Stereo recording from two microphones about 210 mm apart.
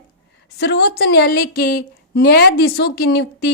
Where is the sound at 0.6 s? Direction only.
50° left (ahead or behind).